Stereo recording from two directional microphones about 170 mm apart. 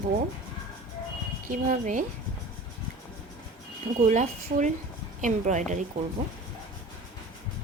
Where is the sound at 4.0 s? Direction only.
45° right (ahead or behind).